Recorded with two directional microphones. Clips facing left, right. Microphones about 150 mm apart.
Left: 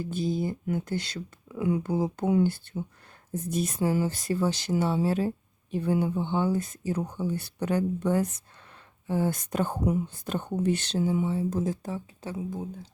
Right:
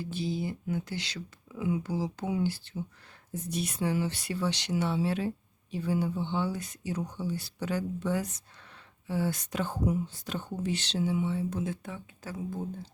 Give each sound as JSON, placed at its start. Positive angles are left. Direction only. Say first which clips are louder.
{"t": 0.0, "sound": "speech", "louder": "left 4 dB", "side_deg": 50}
{"t": 5.7, "sound": "speech", "louder": "left 4 dB", "side_deg": 55}